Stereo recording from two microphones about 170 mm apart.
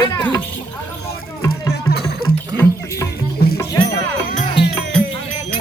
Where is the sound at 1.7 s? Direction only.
70° left (ahead or behind).